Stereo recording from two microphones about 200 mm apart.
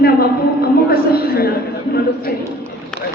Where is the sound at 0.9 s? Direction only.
50° left (ahead or behind).